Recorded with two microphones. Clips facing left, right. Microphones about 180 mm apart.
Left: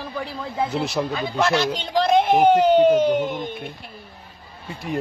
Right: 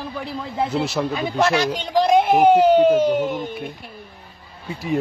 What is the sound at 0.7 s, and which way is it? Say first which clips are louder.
Speech: right 2 dB; centre (ahead or behind).